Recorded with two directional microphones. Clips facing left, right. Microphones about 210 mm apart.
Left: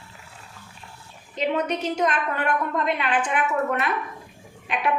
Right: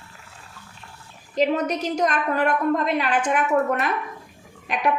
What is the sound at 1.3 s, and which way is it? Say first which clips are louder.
A woman's voice: right 3 dB; 40° right (ahead or behind).